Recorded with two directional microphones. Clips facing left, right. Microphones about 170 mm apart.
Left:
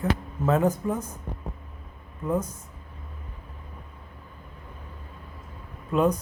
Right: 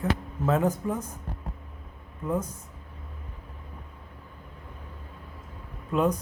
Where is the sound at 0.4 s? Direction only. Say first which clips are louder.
Left 2 dB; 45° left (ahead or behind).